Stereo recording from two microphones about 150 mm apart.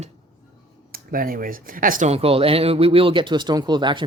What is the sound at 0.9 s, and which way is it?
Speech, 75° right (ahead or behind).